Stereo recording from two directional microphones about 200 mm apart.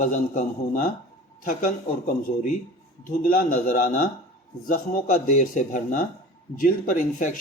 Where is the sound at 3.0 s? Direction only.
45° left (ahead or behind).